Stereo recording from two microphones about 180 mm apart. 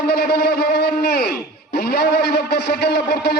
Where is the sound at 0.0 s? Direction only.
65° left (ahead or behind).